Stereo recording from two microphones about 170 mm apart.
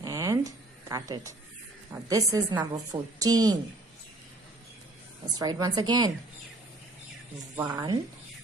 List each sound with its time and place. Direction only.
0.0 s a sound: 20° right (ahead or behind)
1.9 s a woman's voice: 20° right (ahead or behind)
5.4 s a woman's voice: 25° right (ahead or behind)
7.5 s speech: 15° right (ahead or behind)